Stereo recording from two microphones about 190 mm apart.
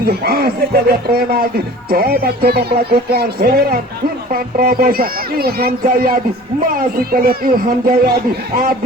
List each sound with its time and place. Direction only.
0.0 s speech: 55° right (ahead or behind)